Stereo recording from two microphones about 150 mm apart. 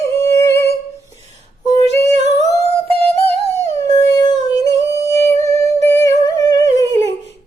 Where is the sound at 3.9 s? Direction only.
25° left (ahead or behind).